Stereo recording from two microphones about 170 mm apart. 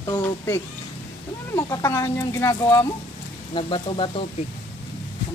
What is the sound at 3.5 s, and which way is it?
Speech, 30° left (ahead or behind).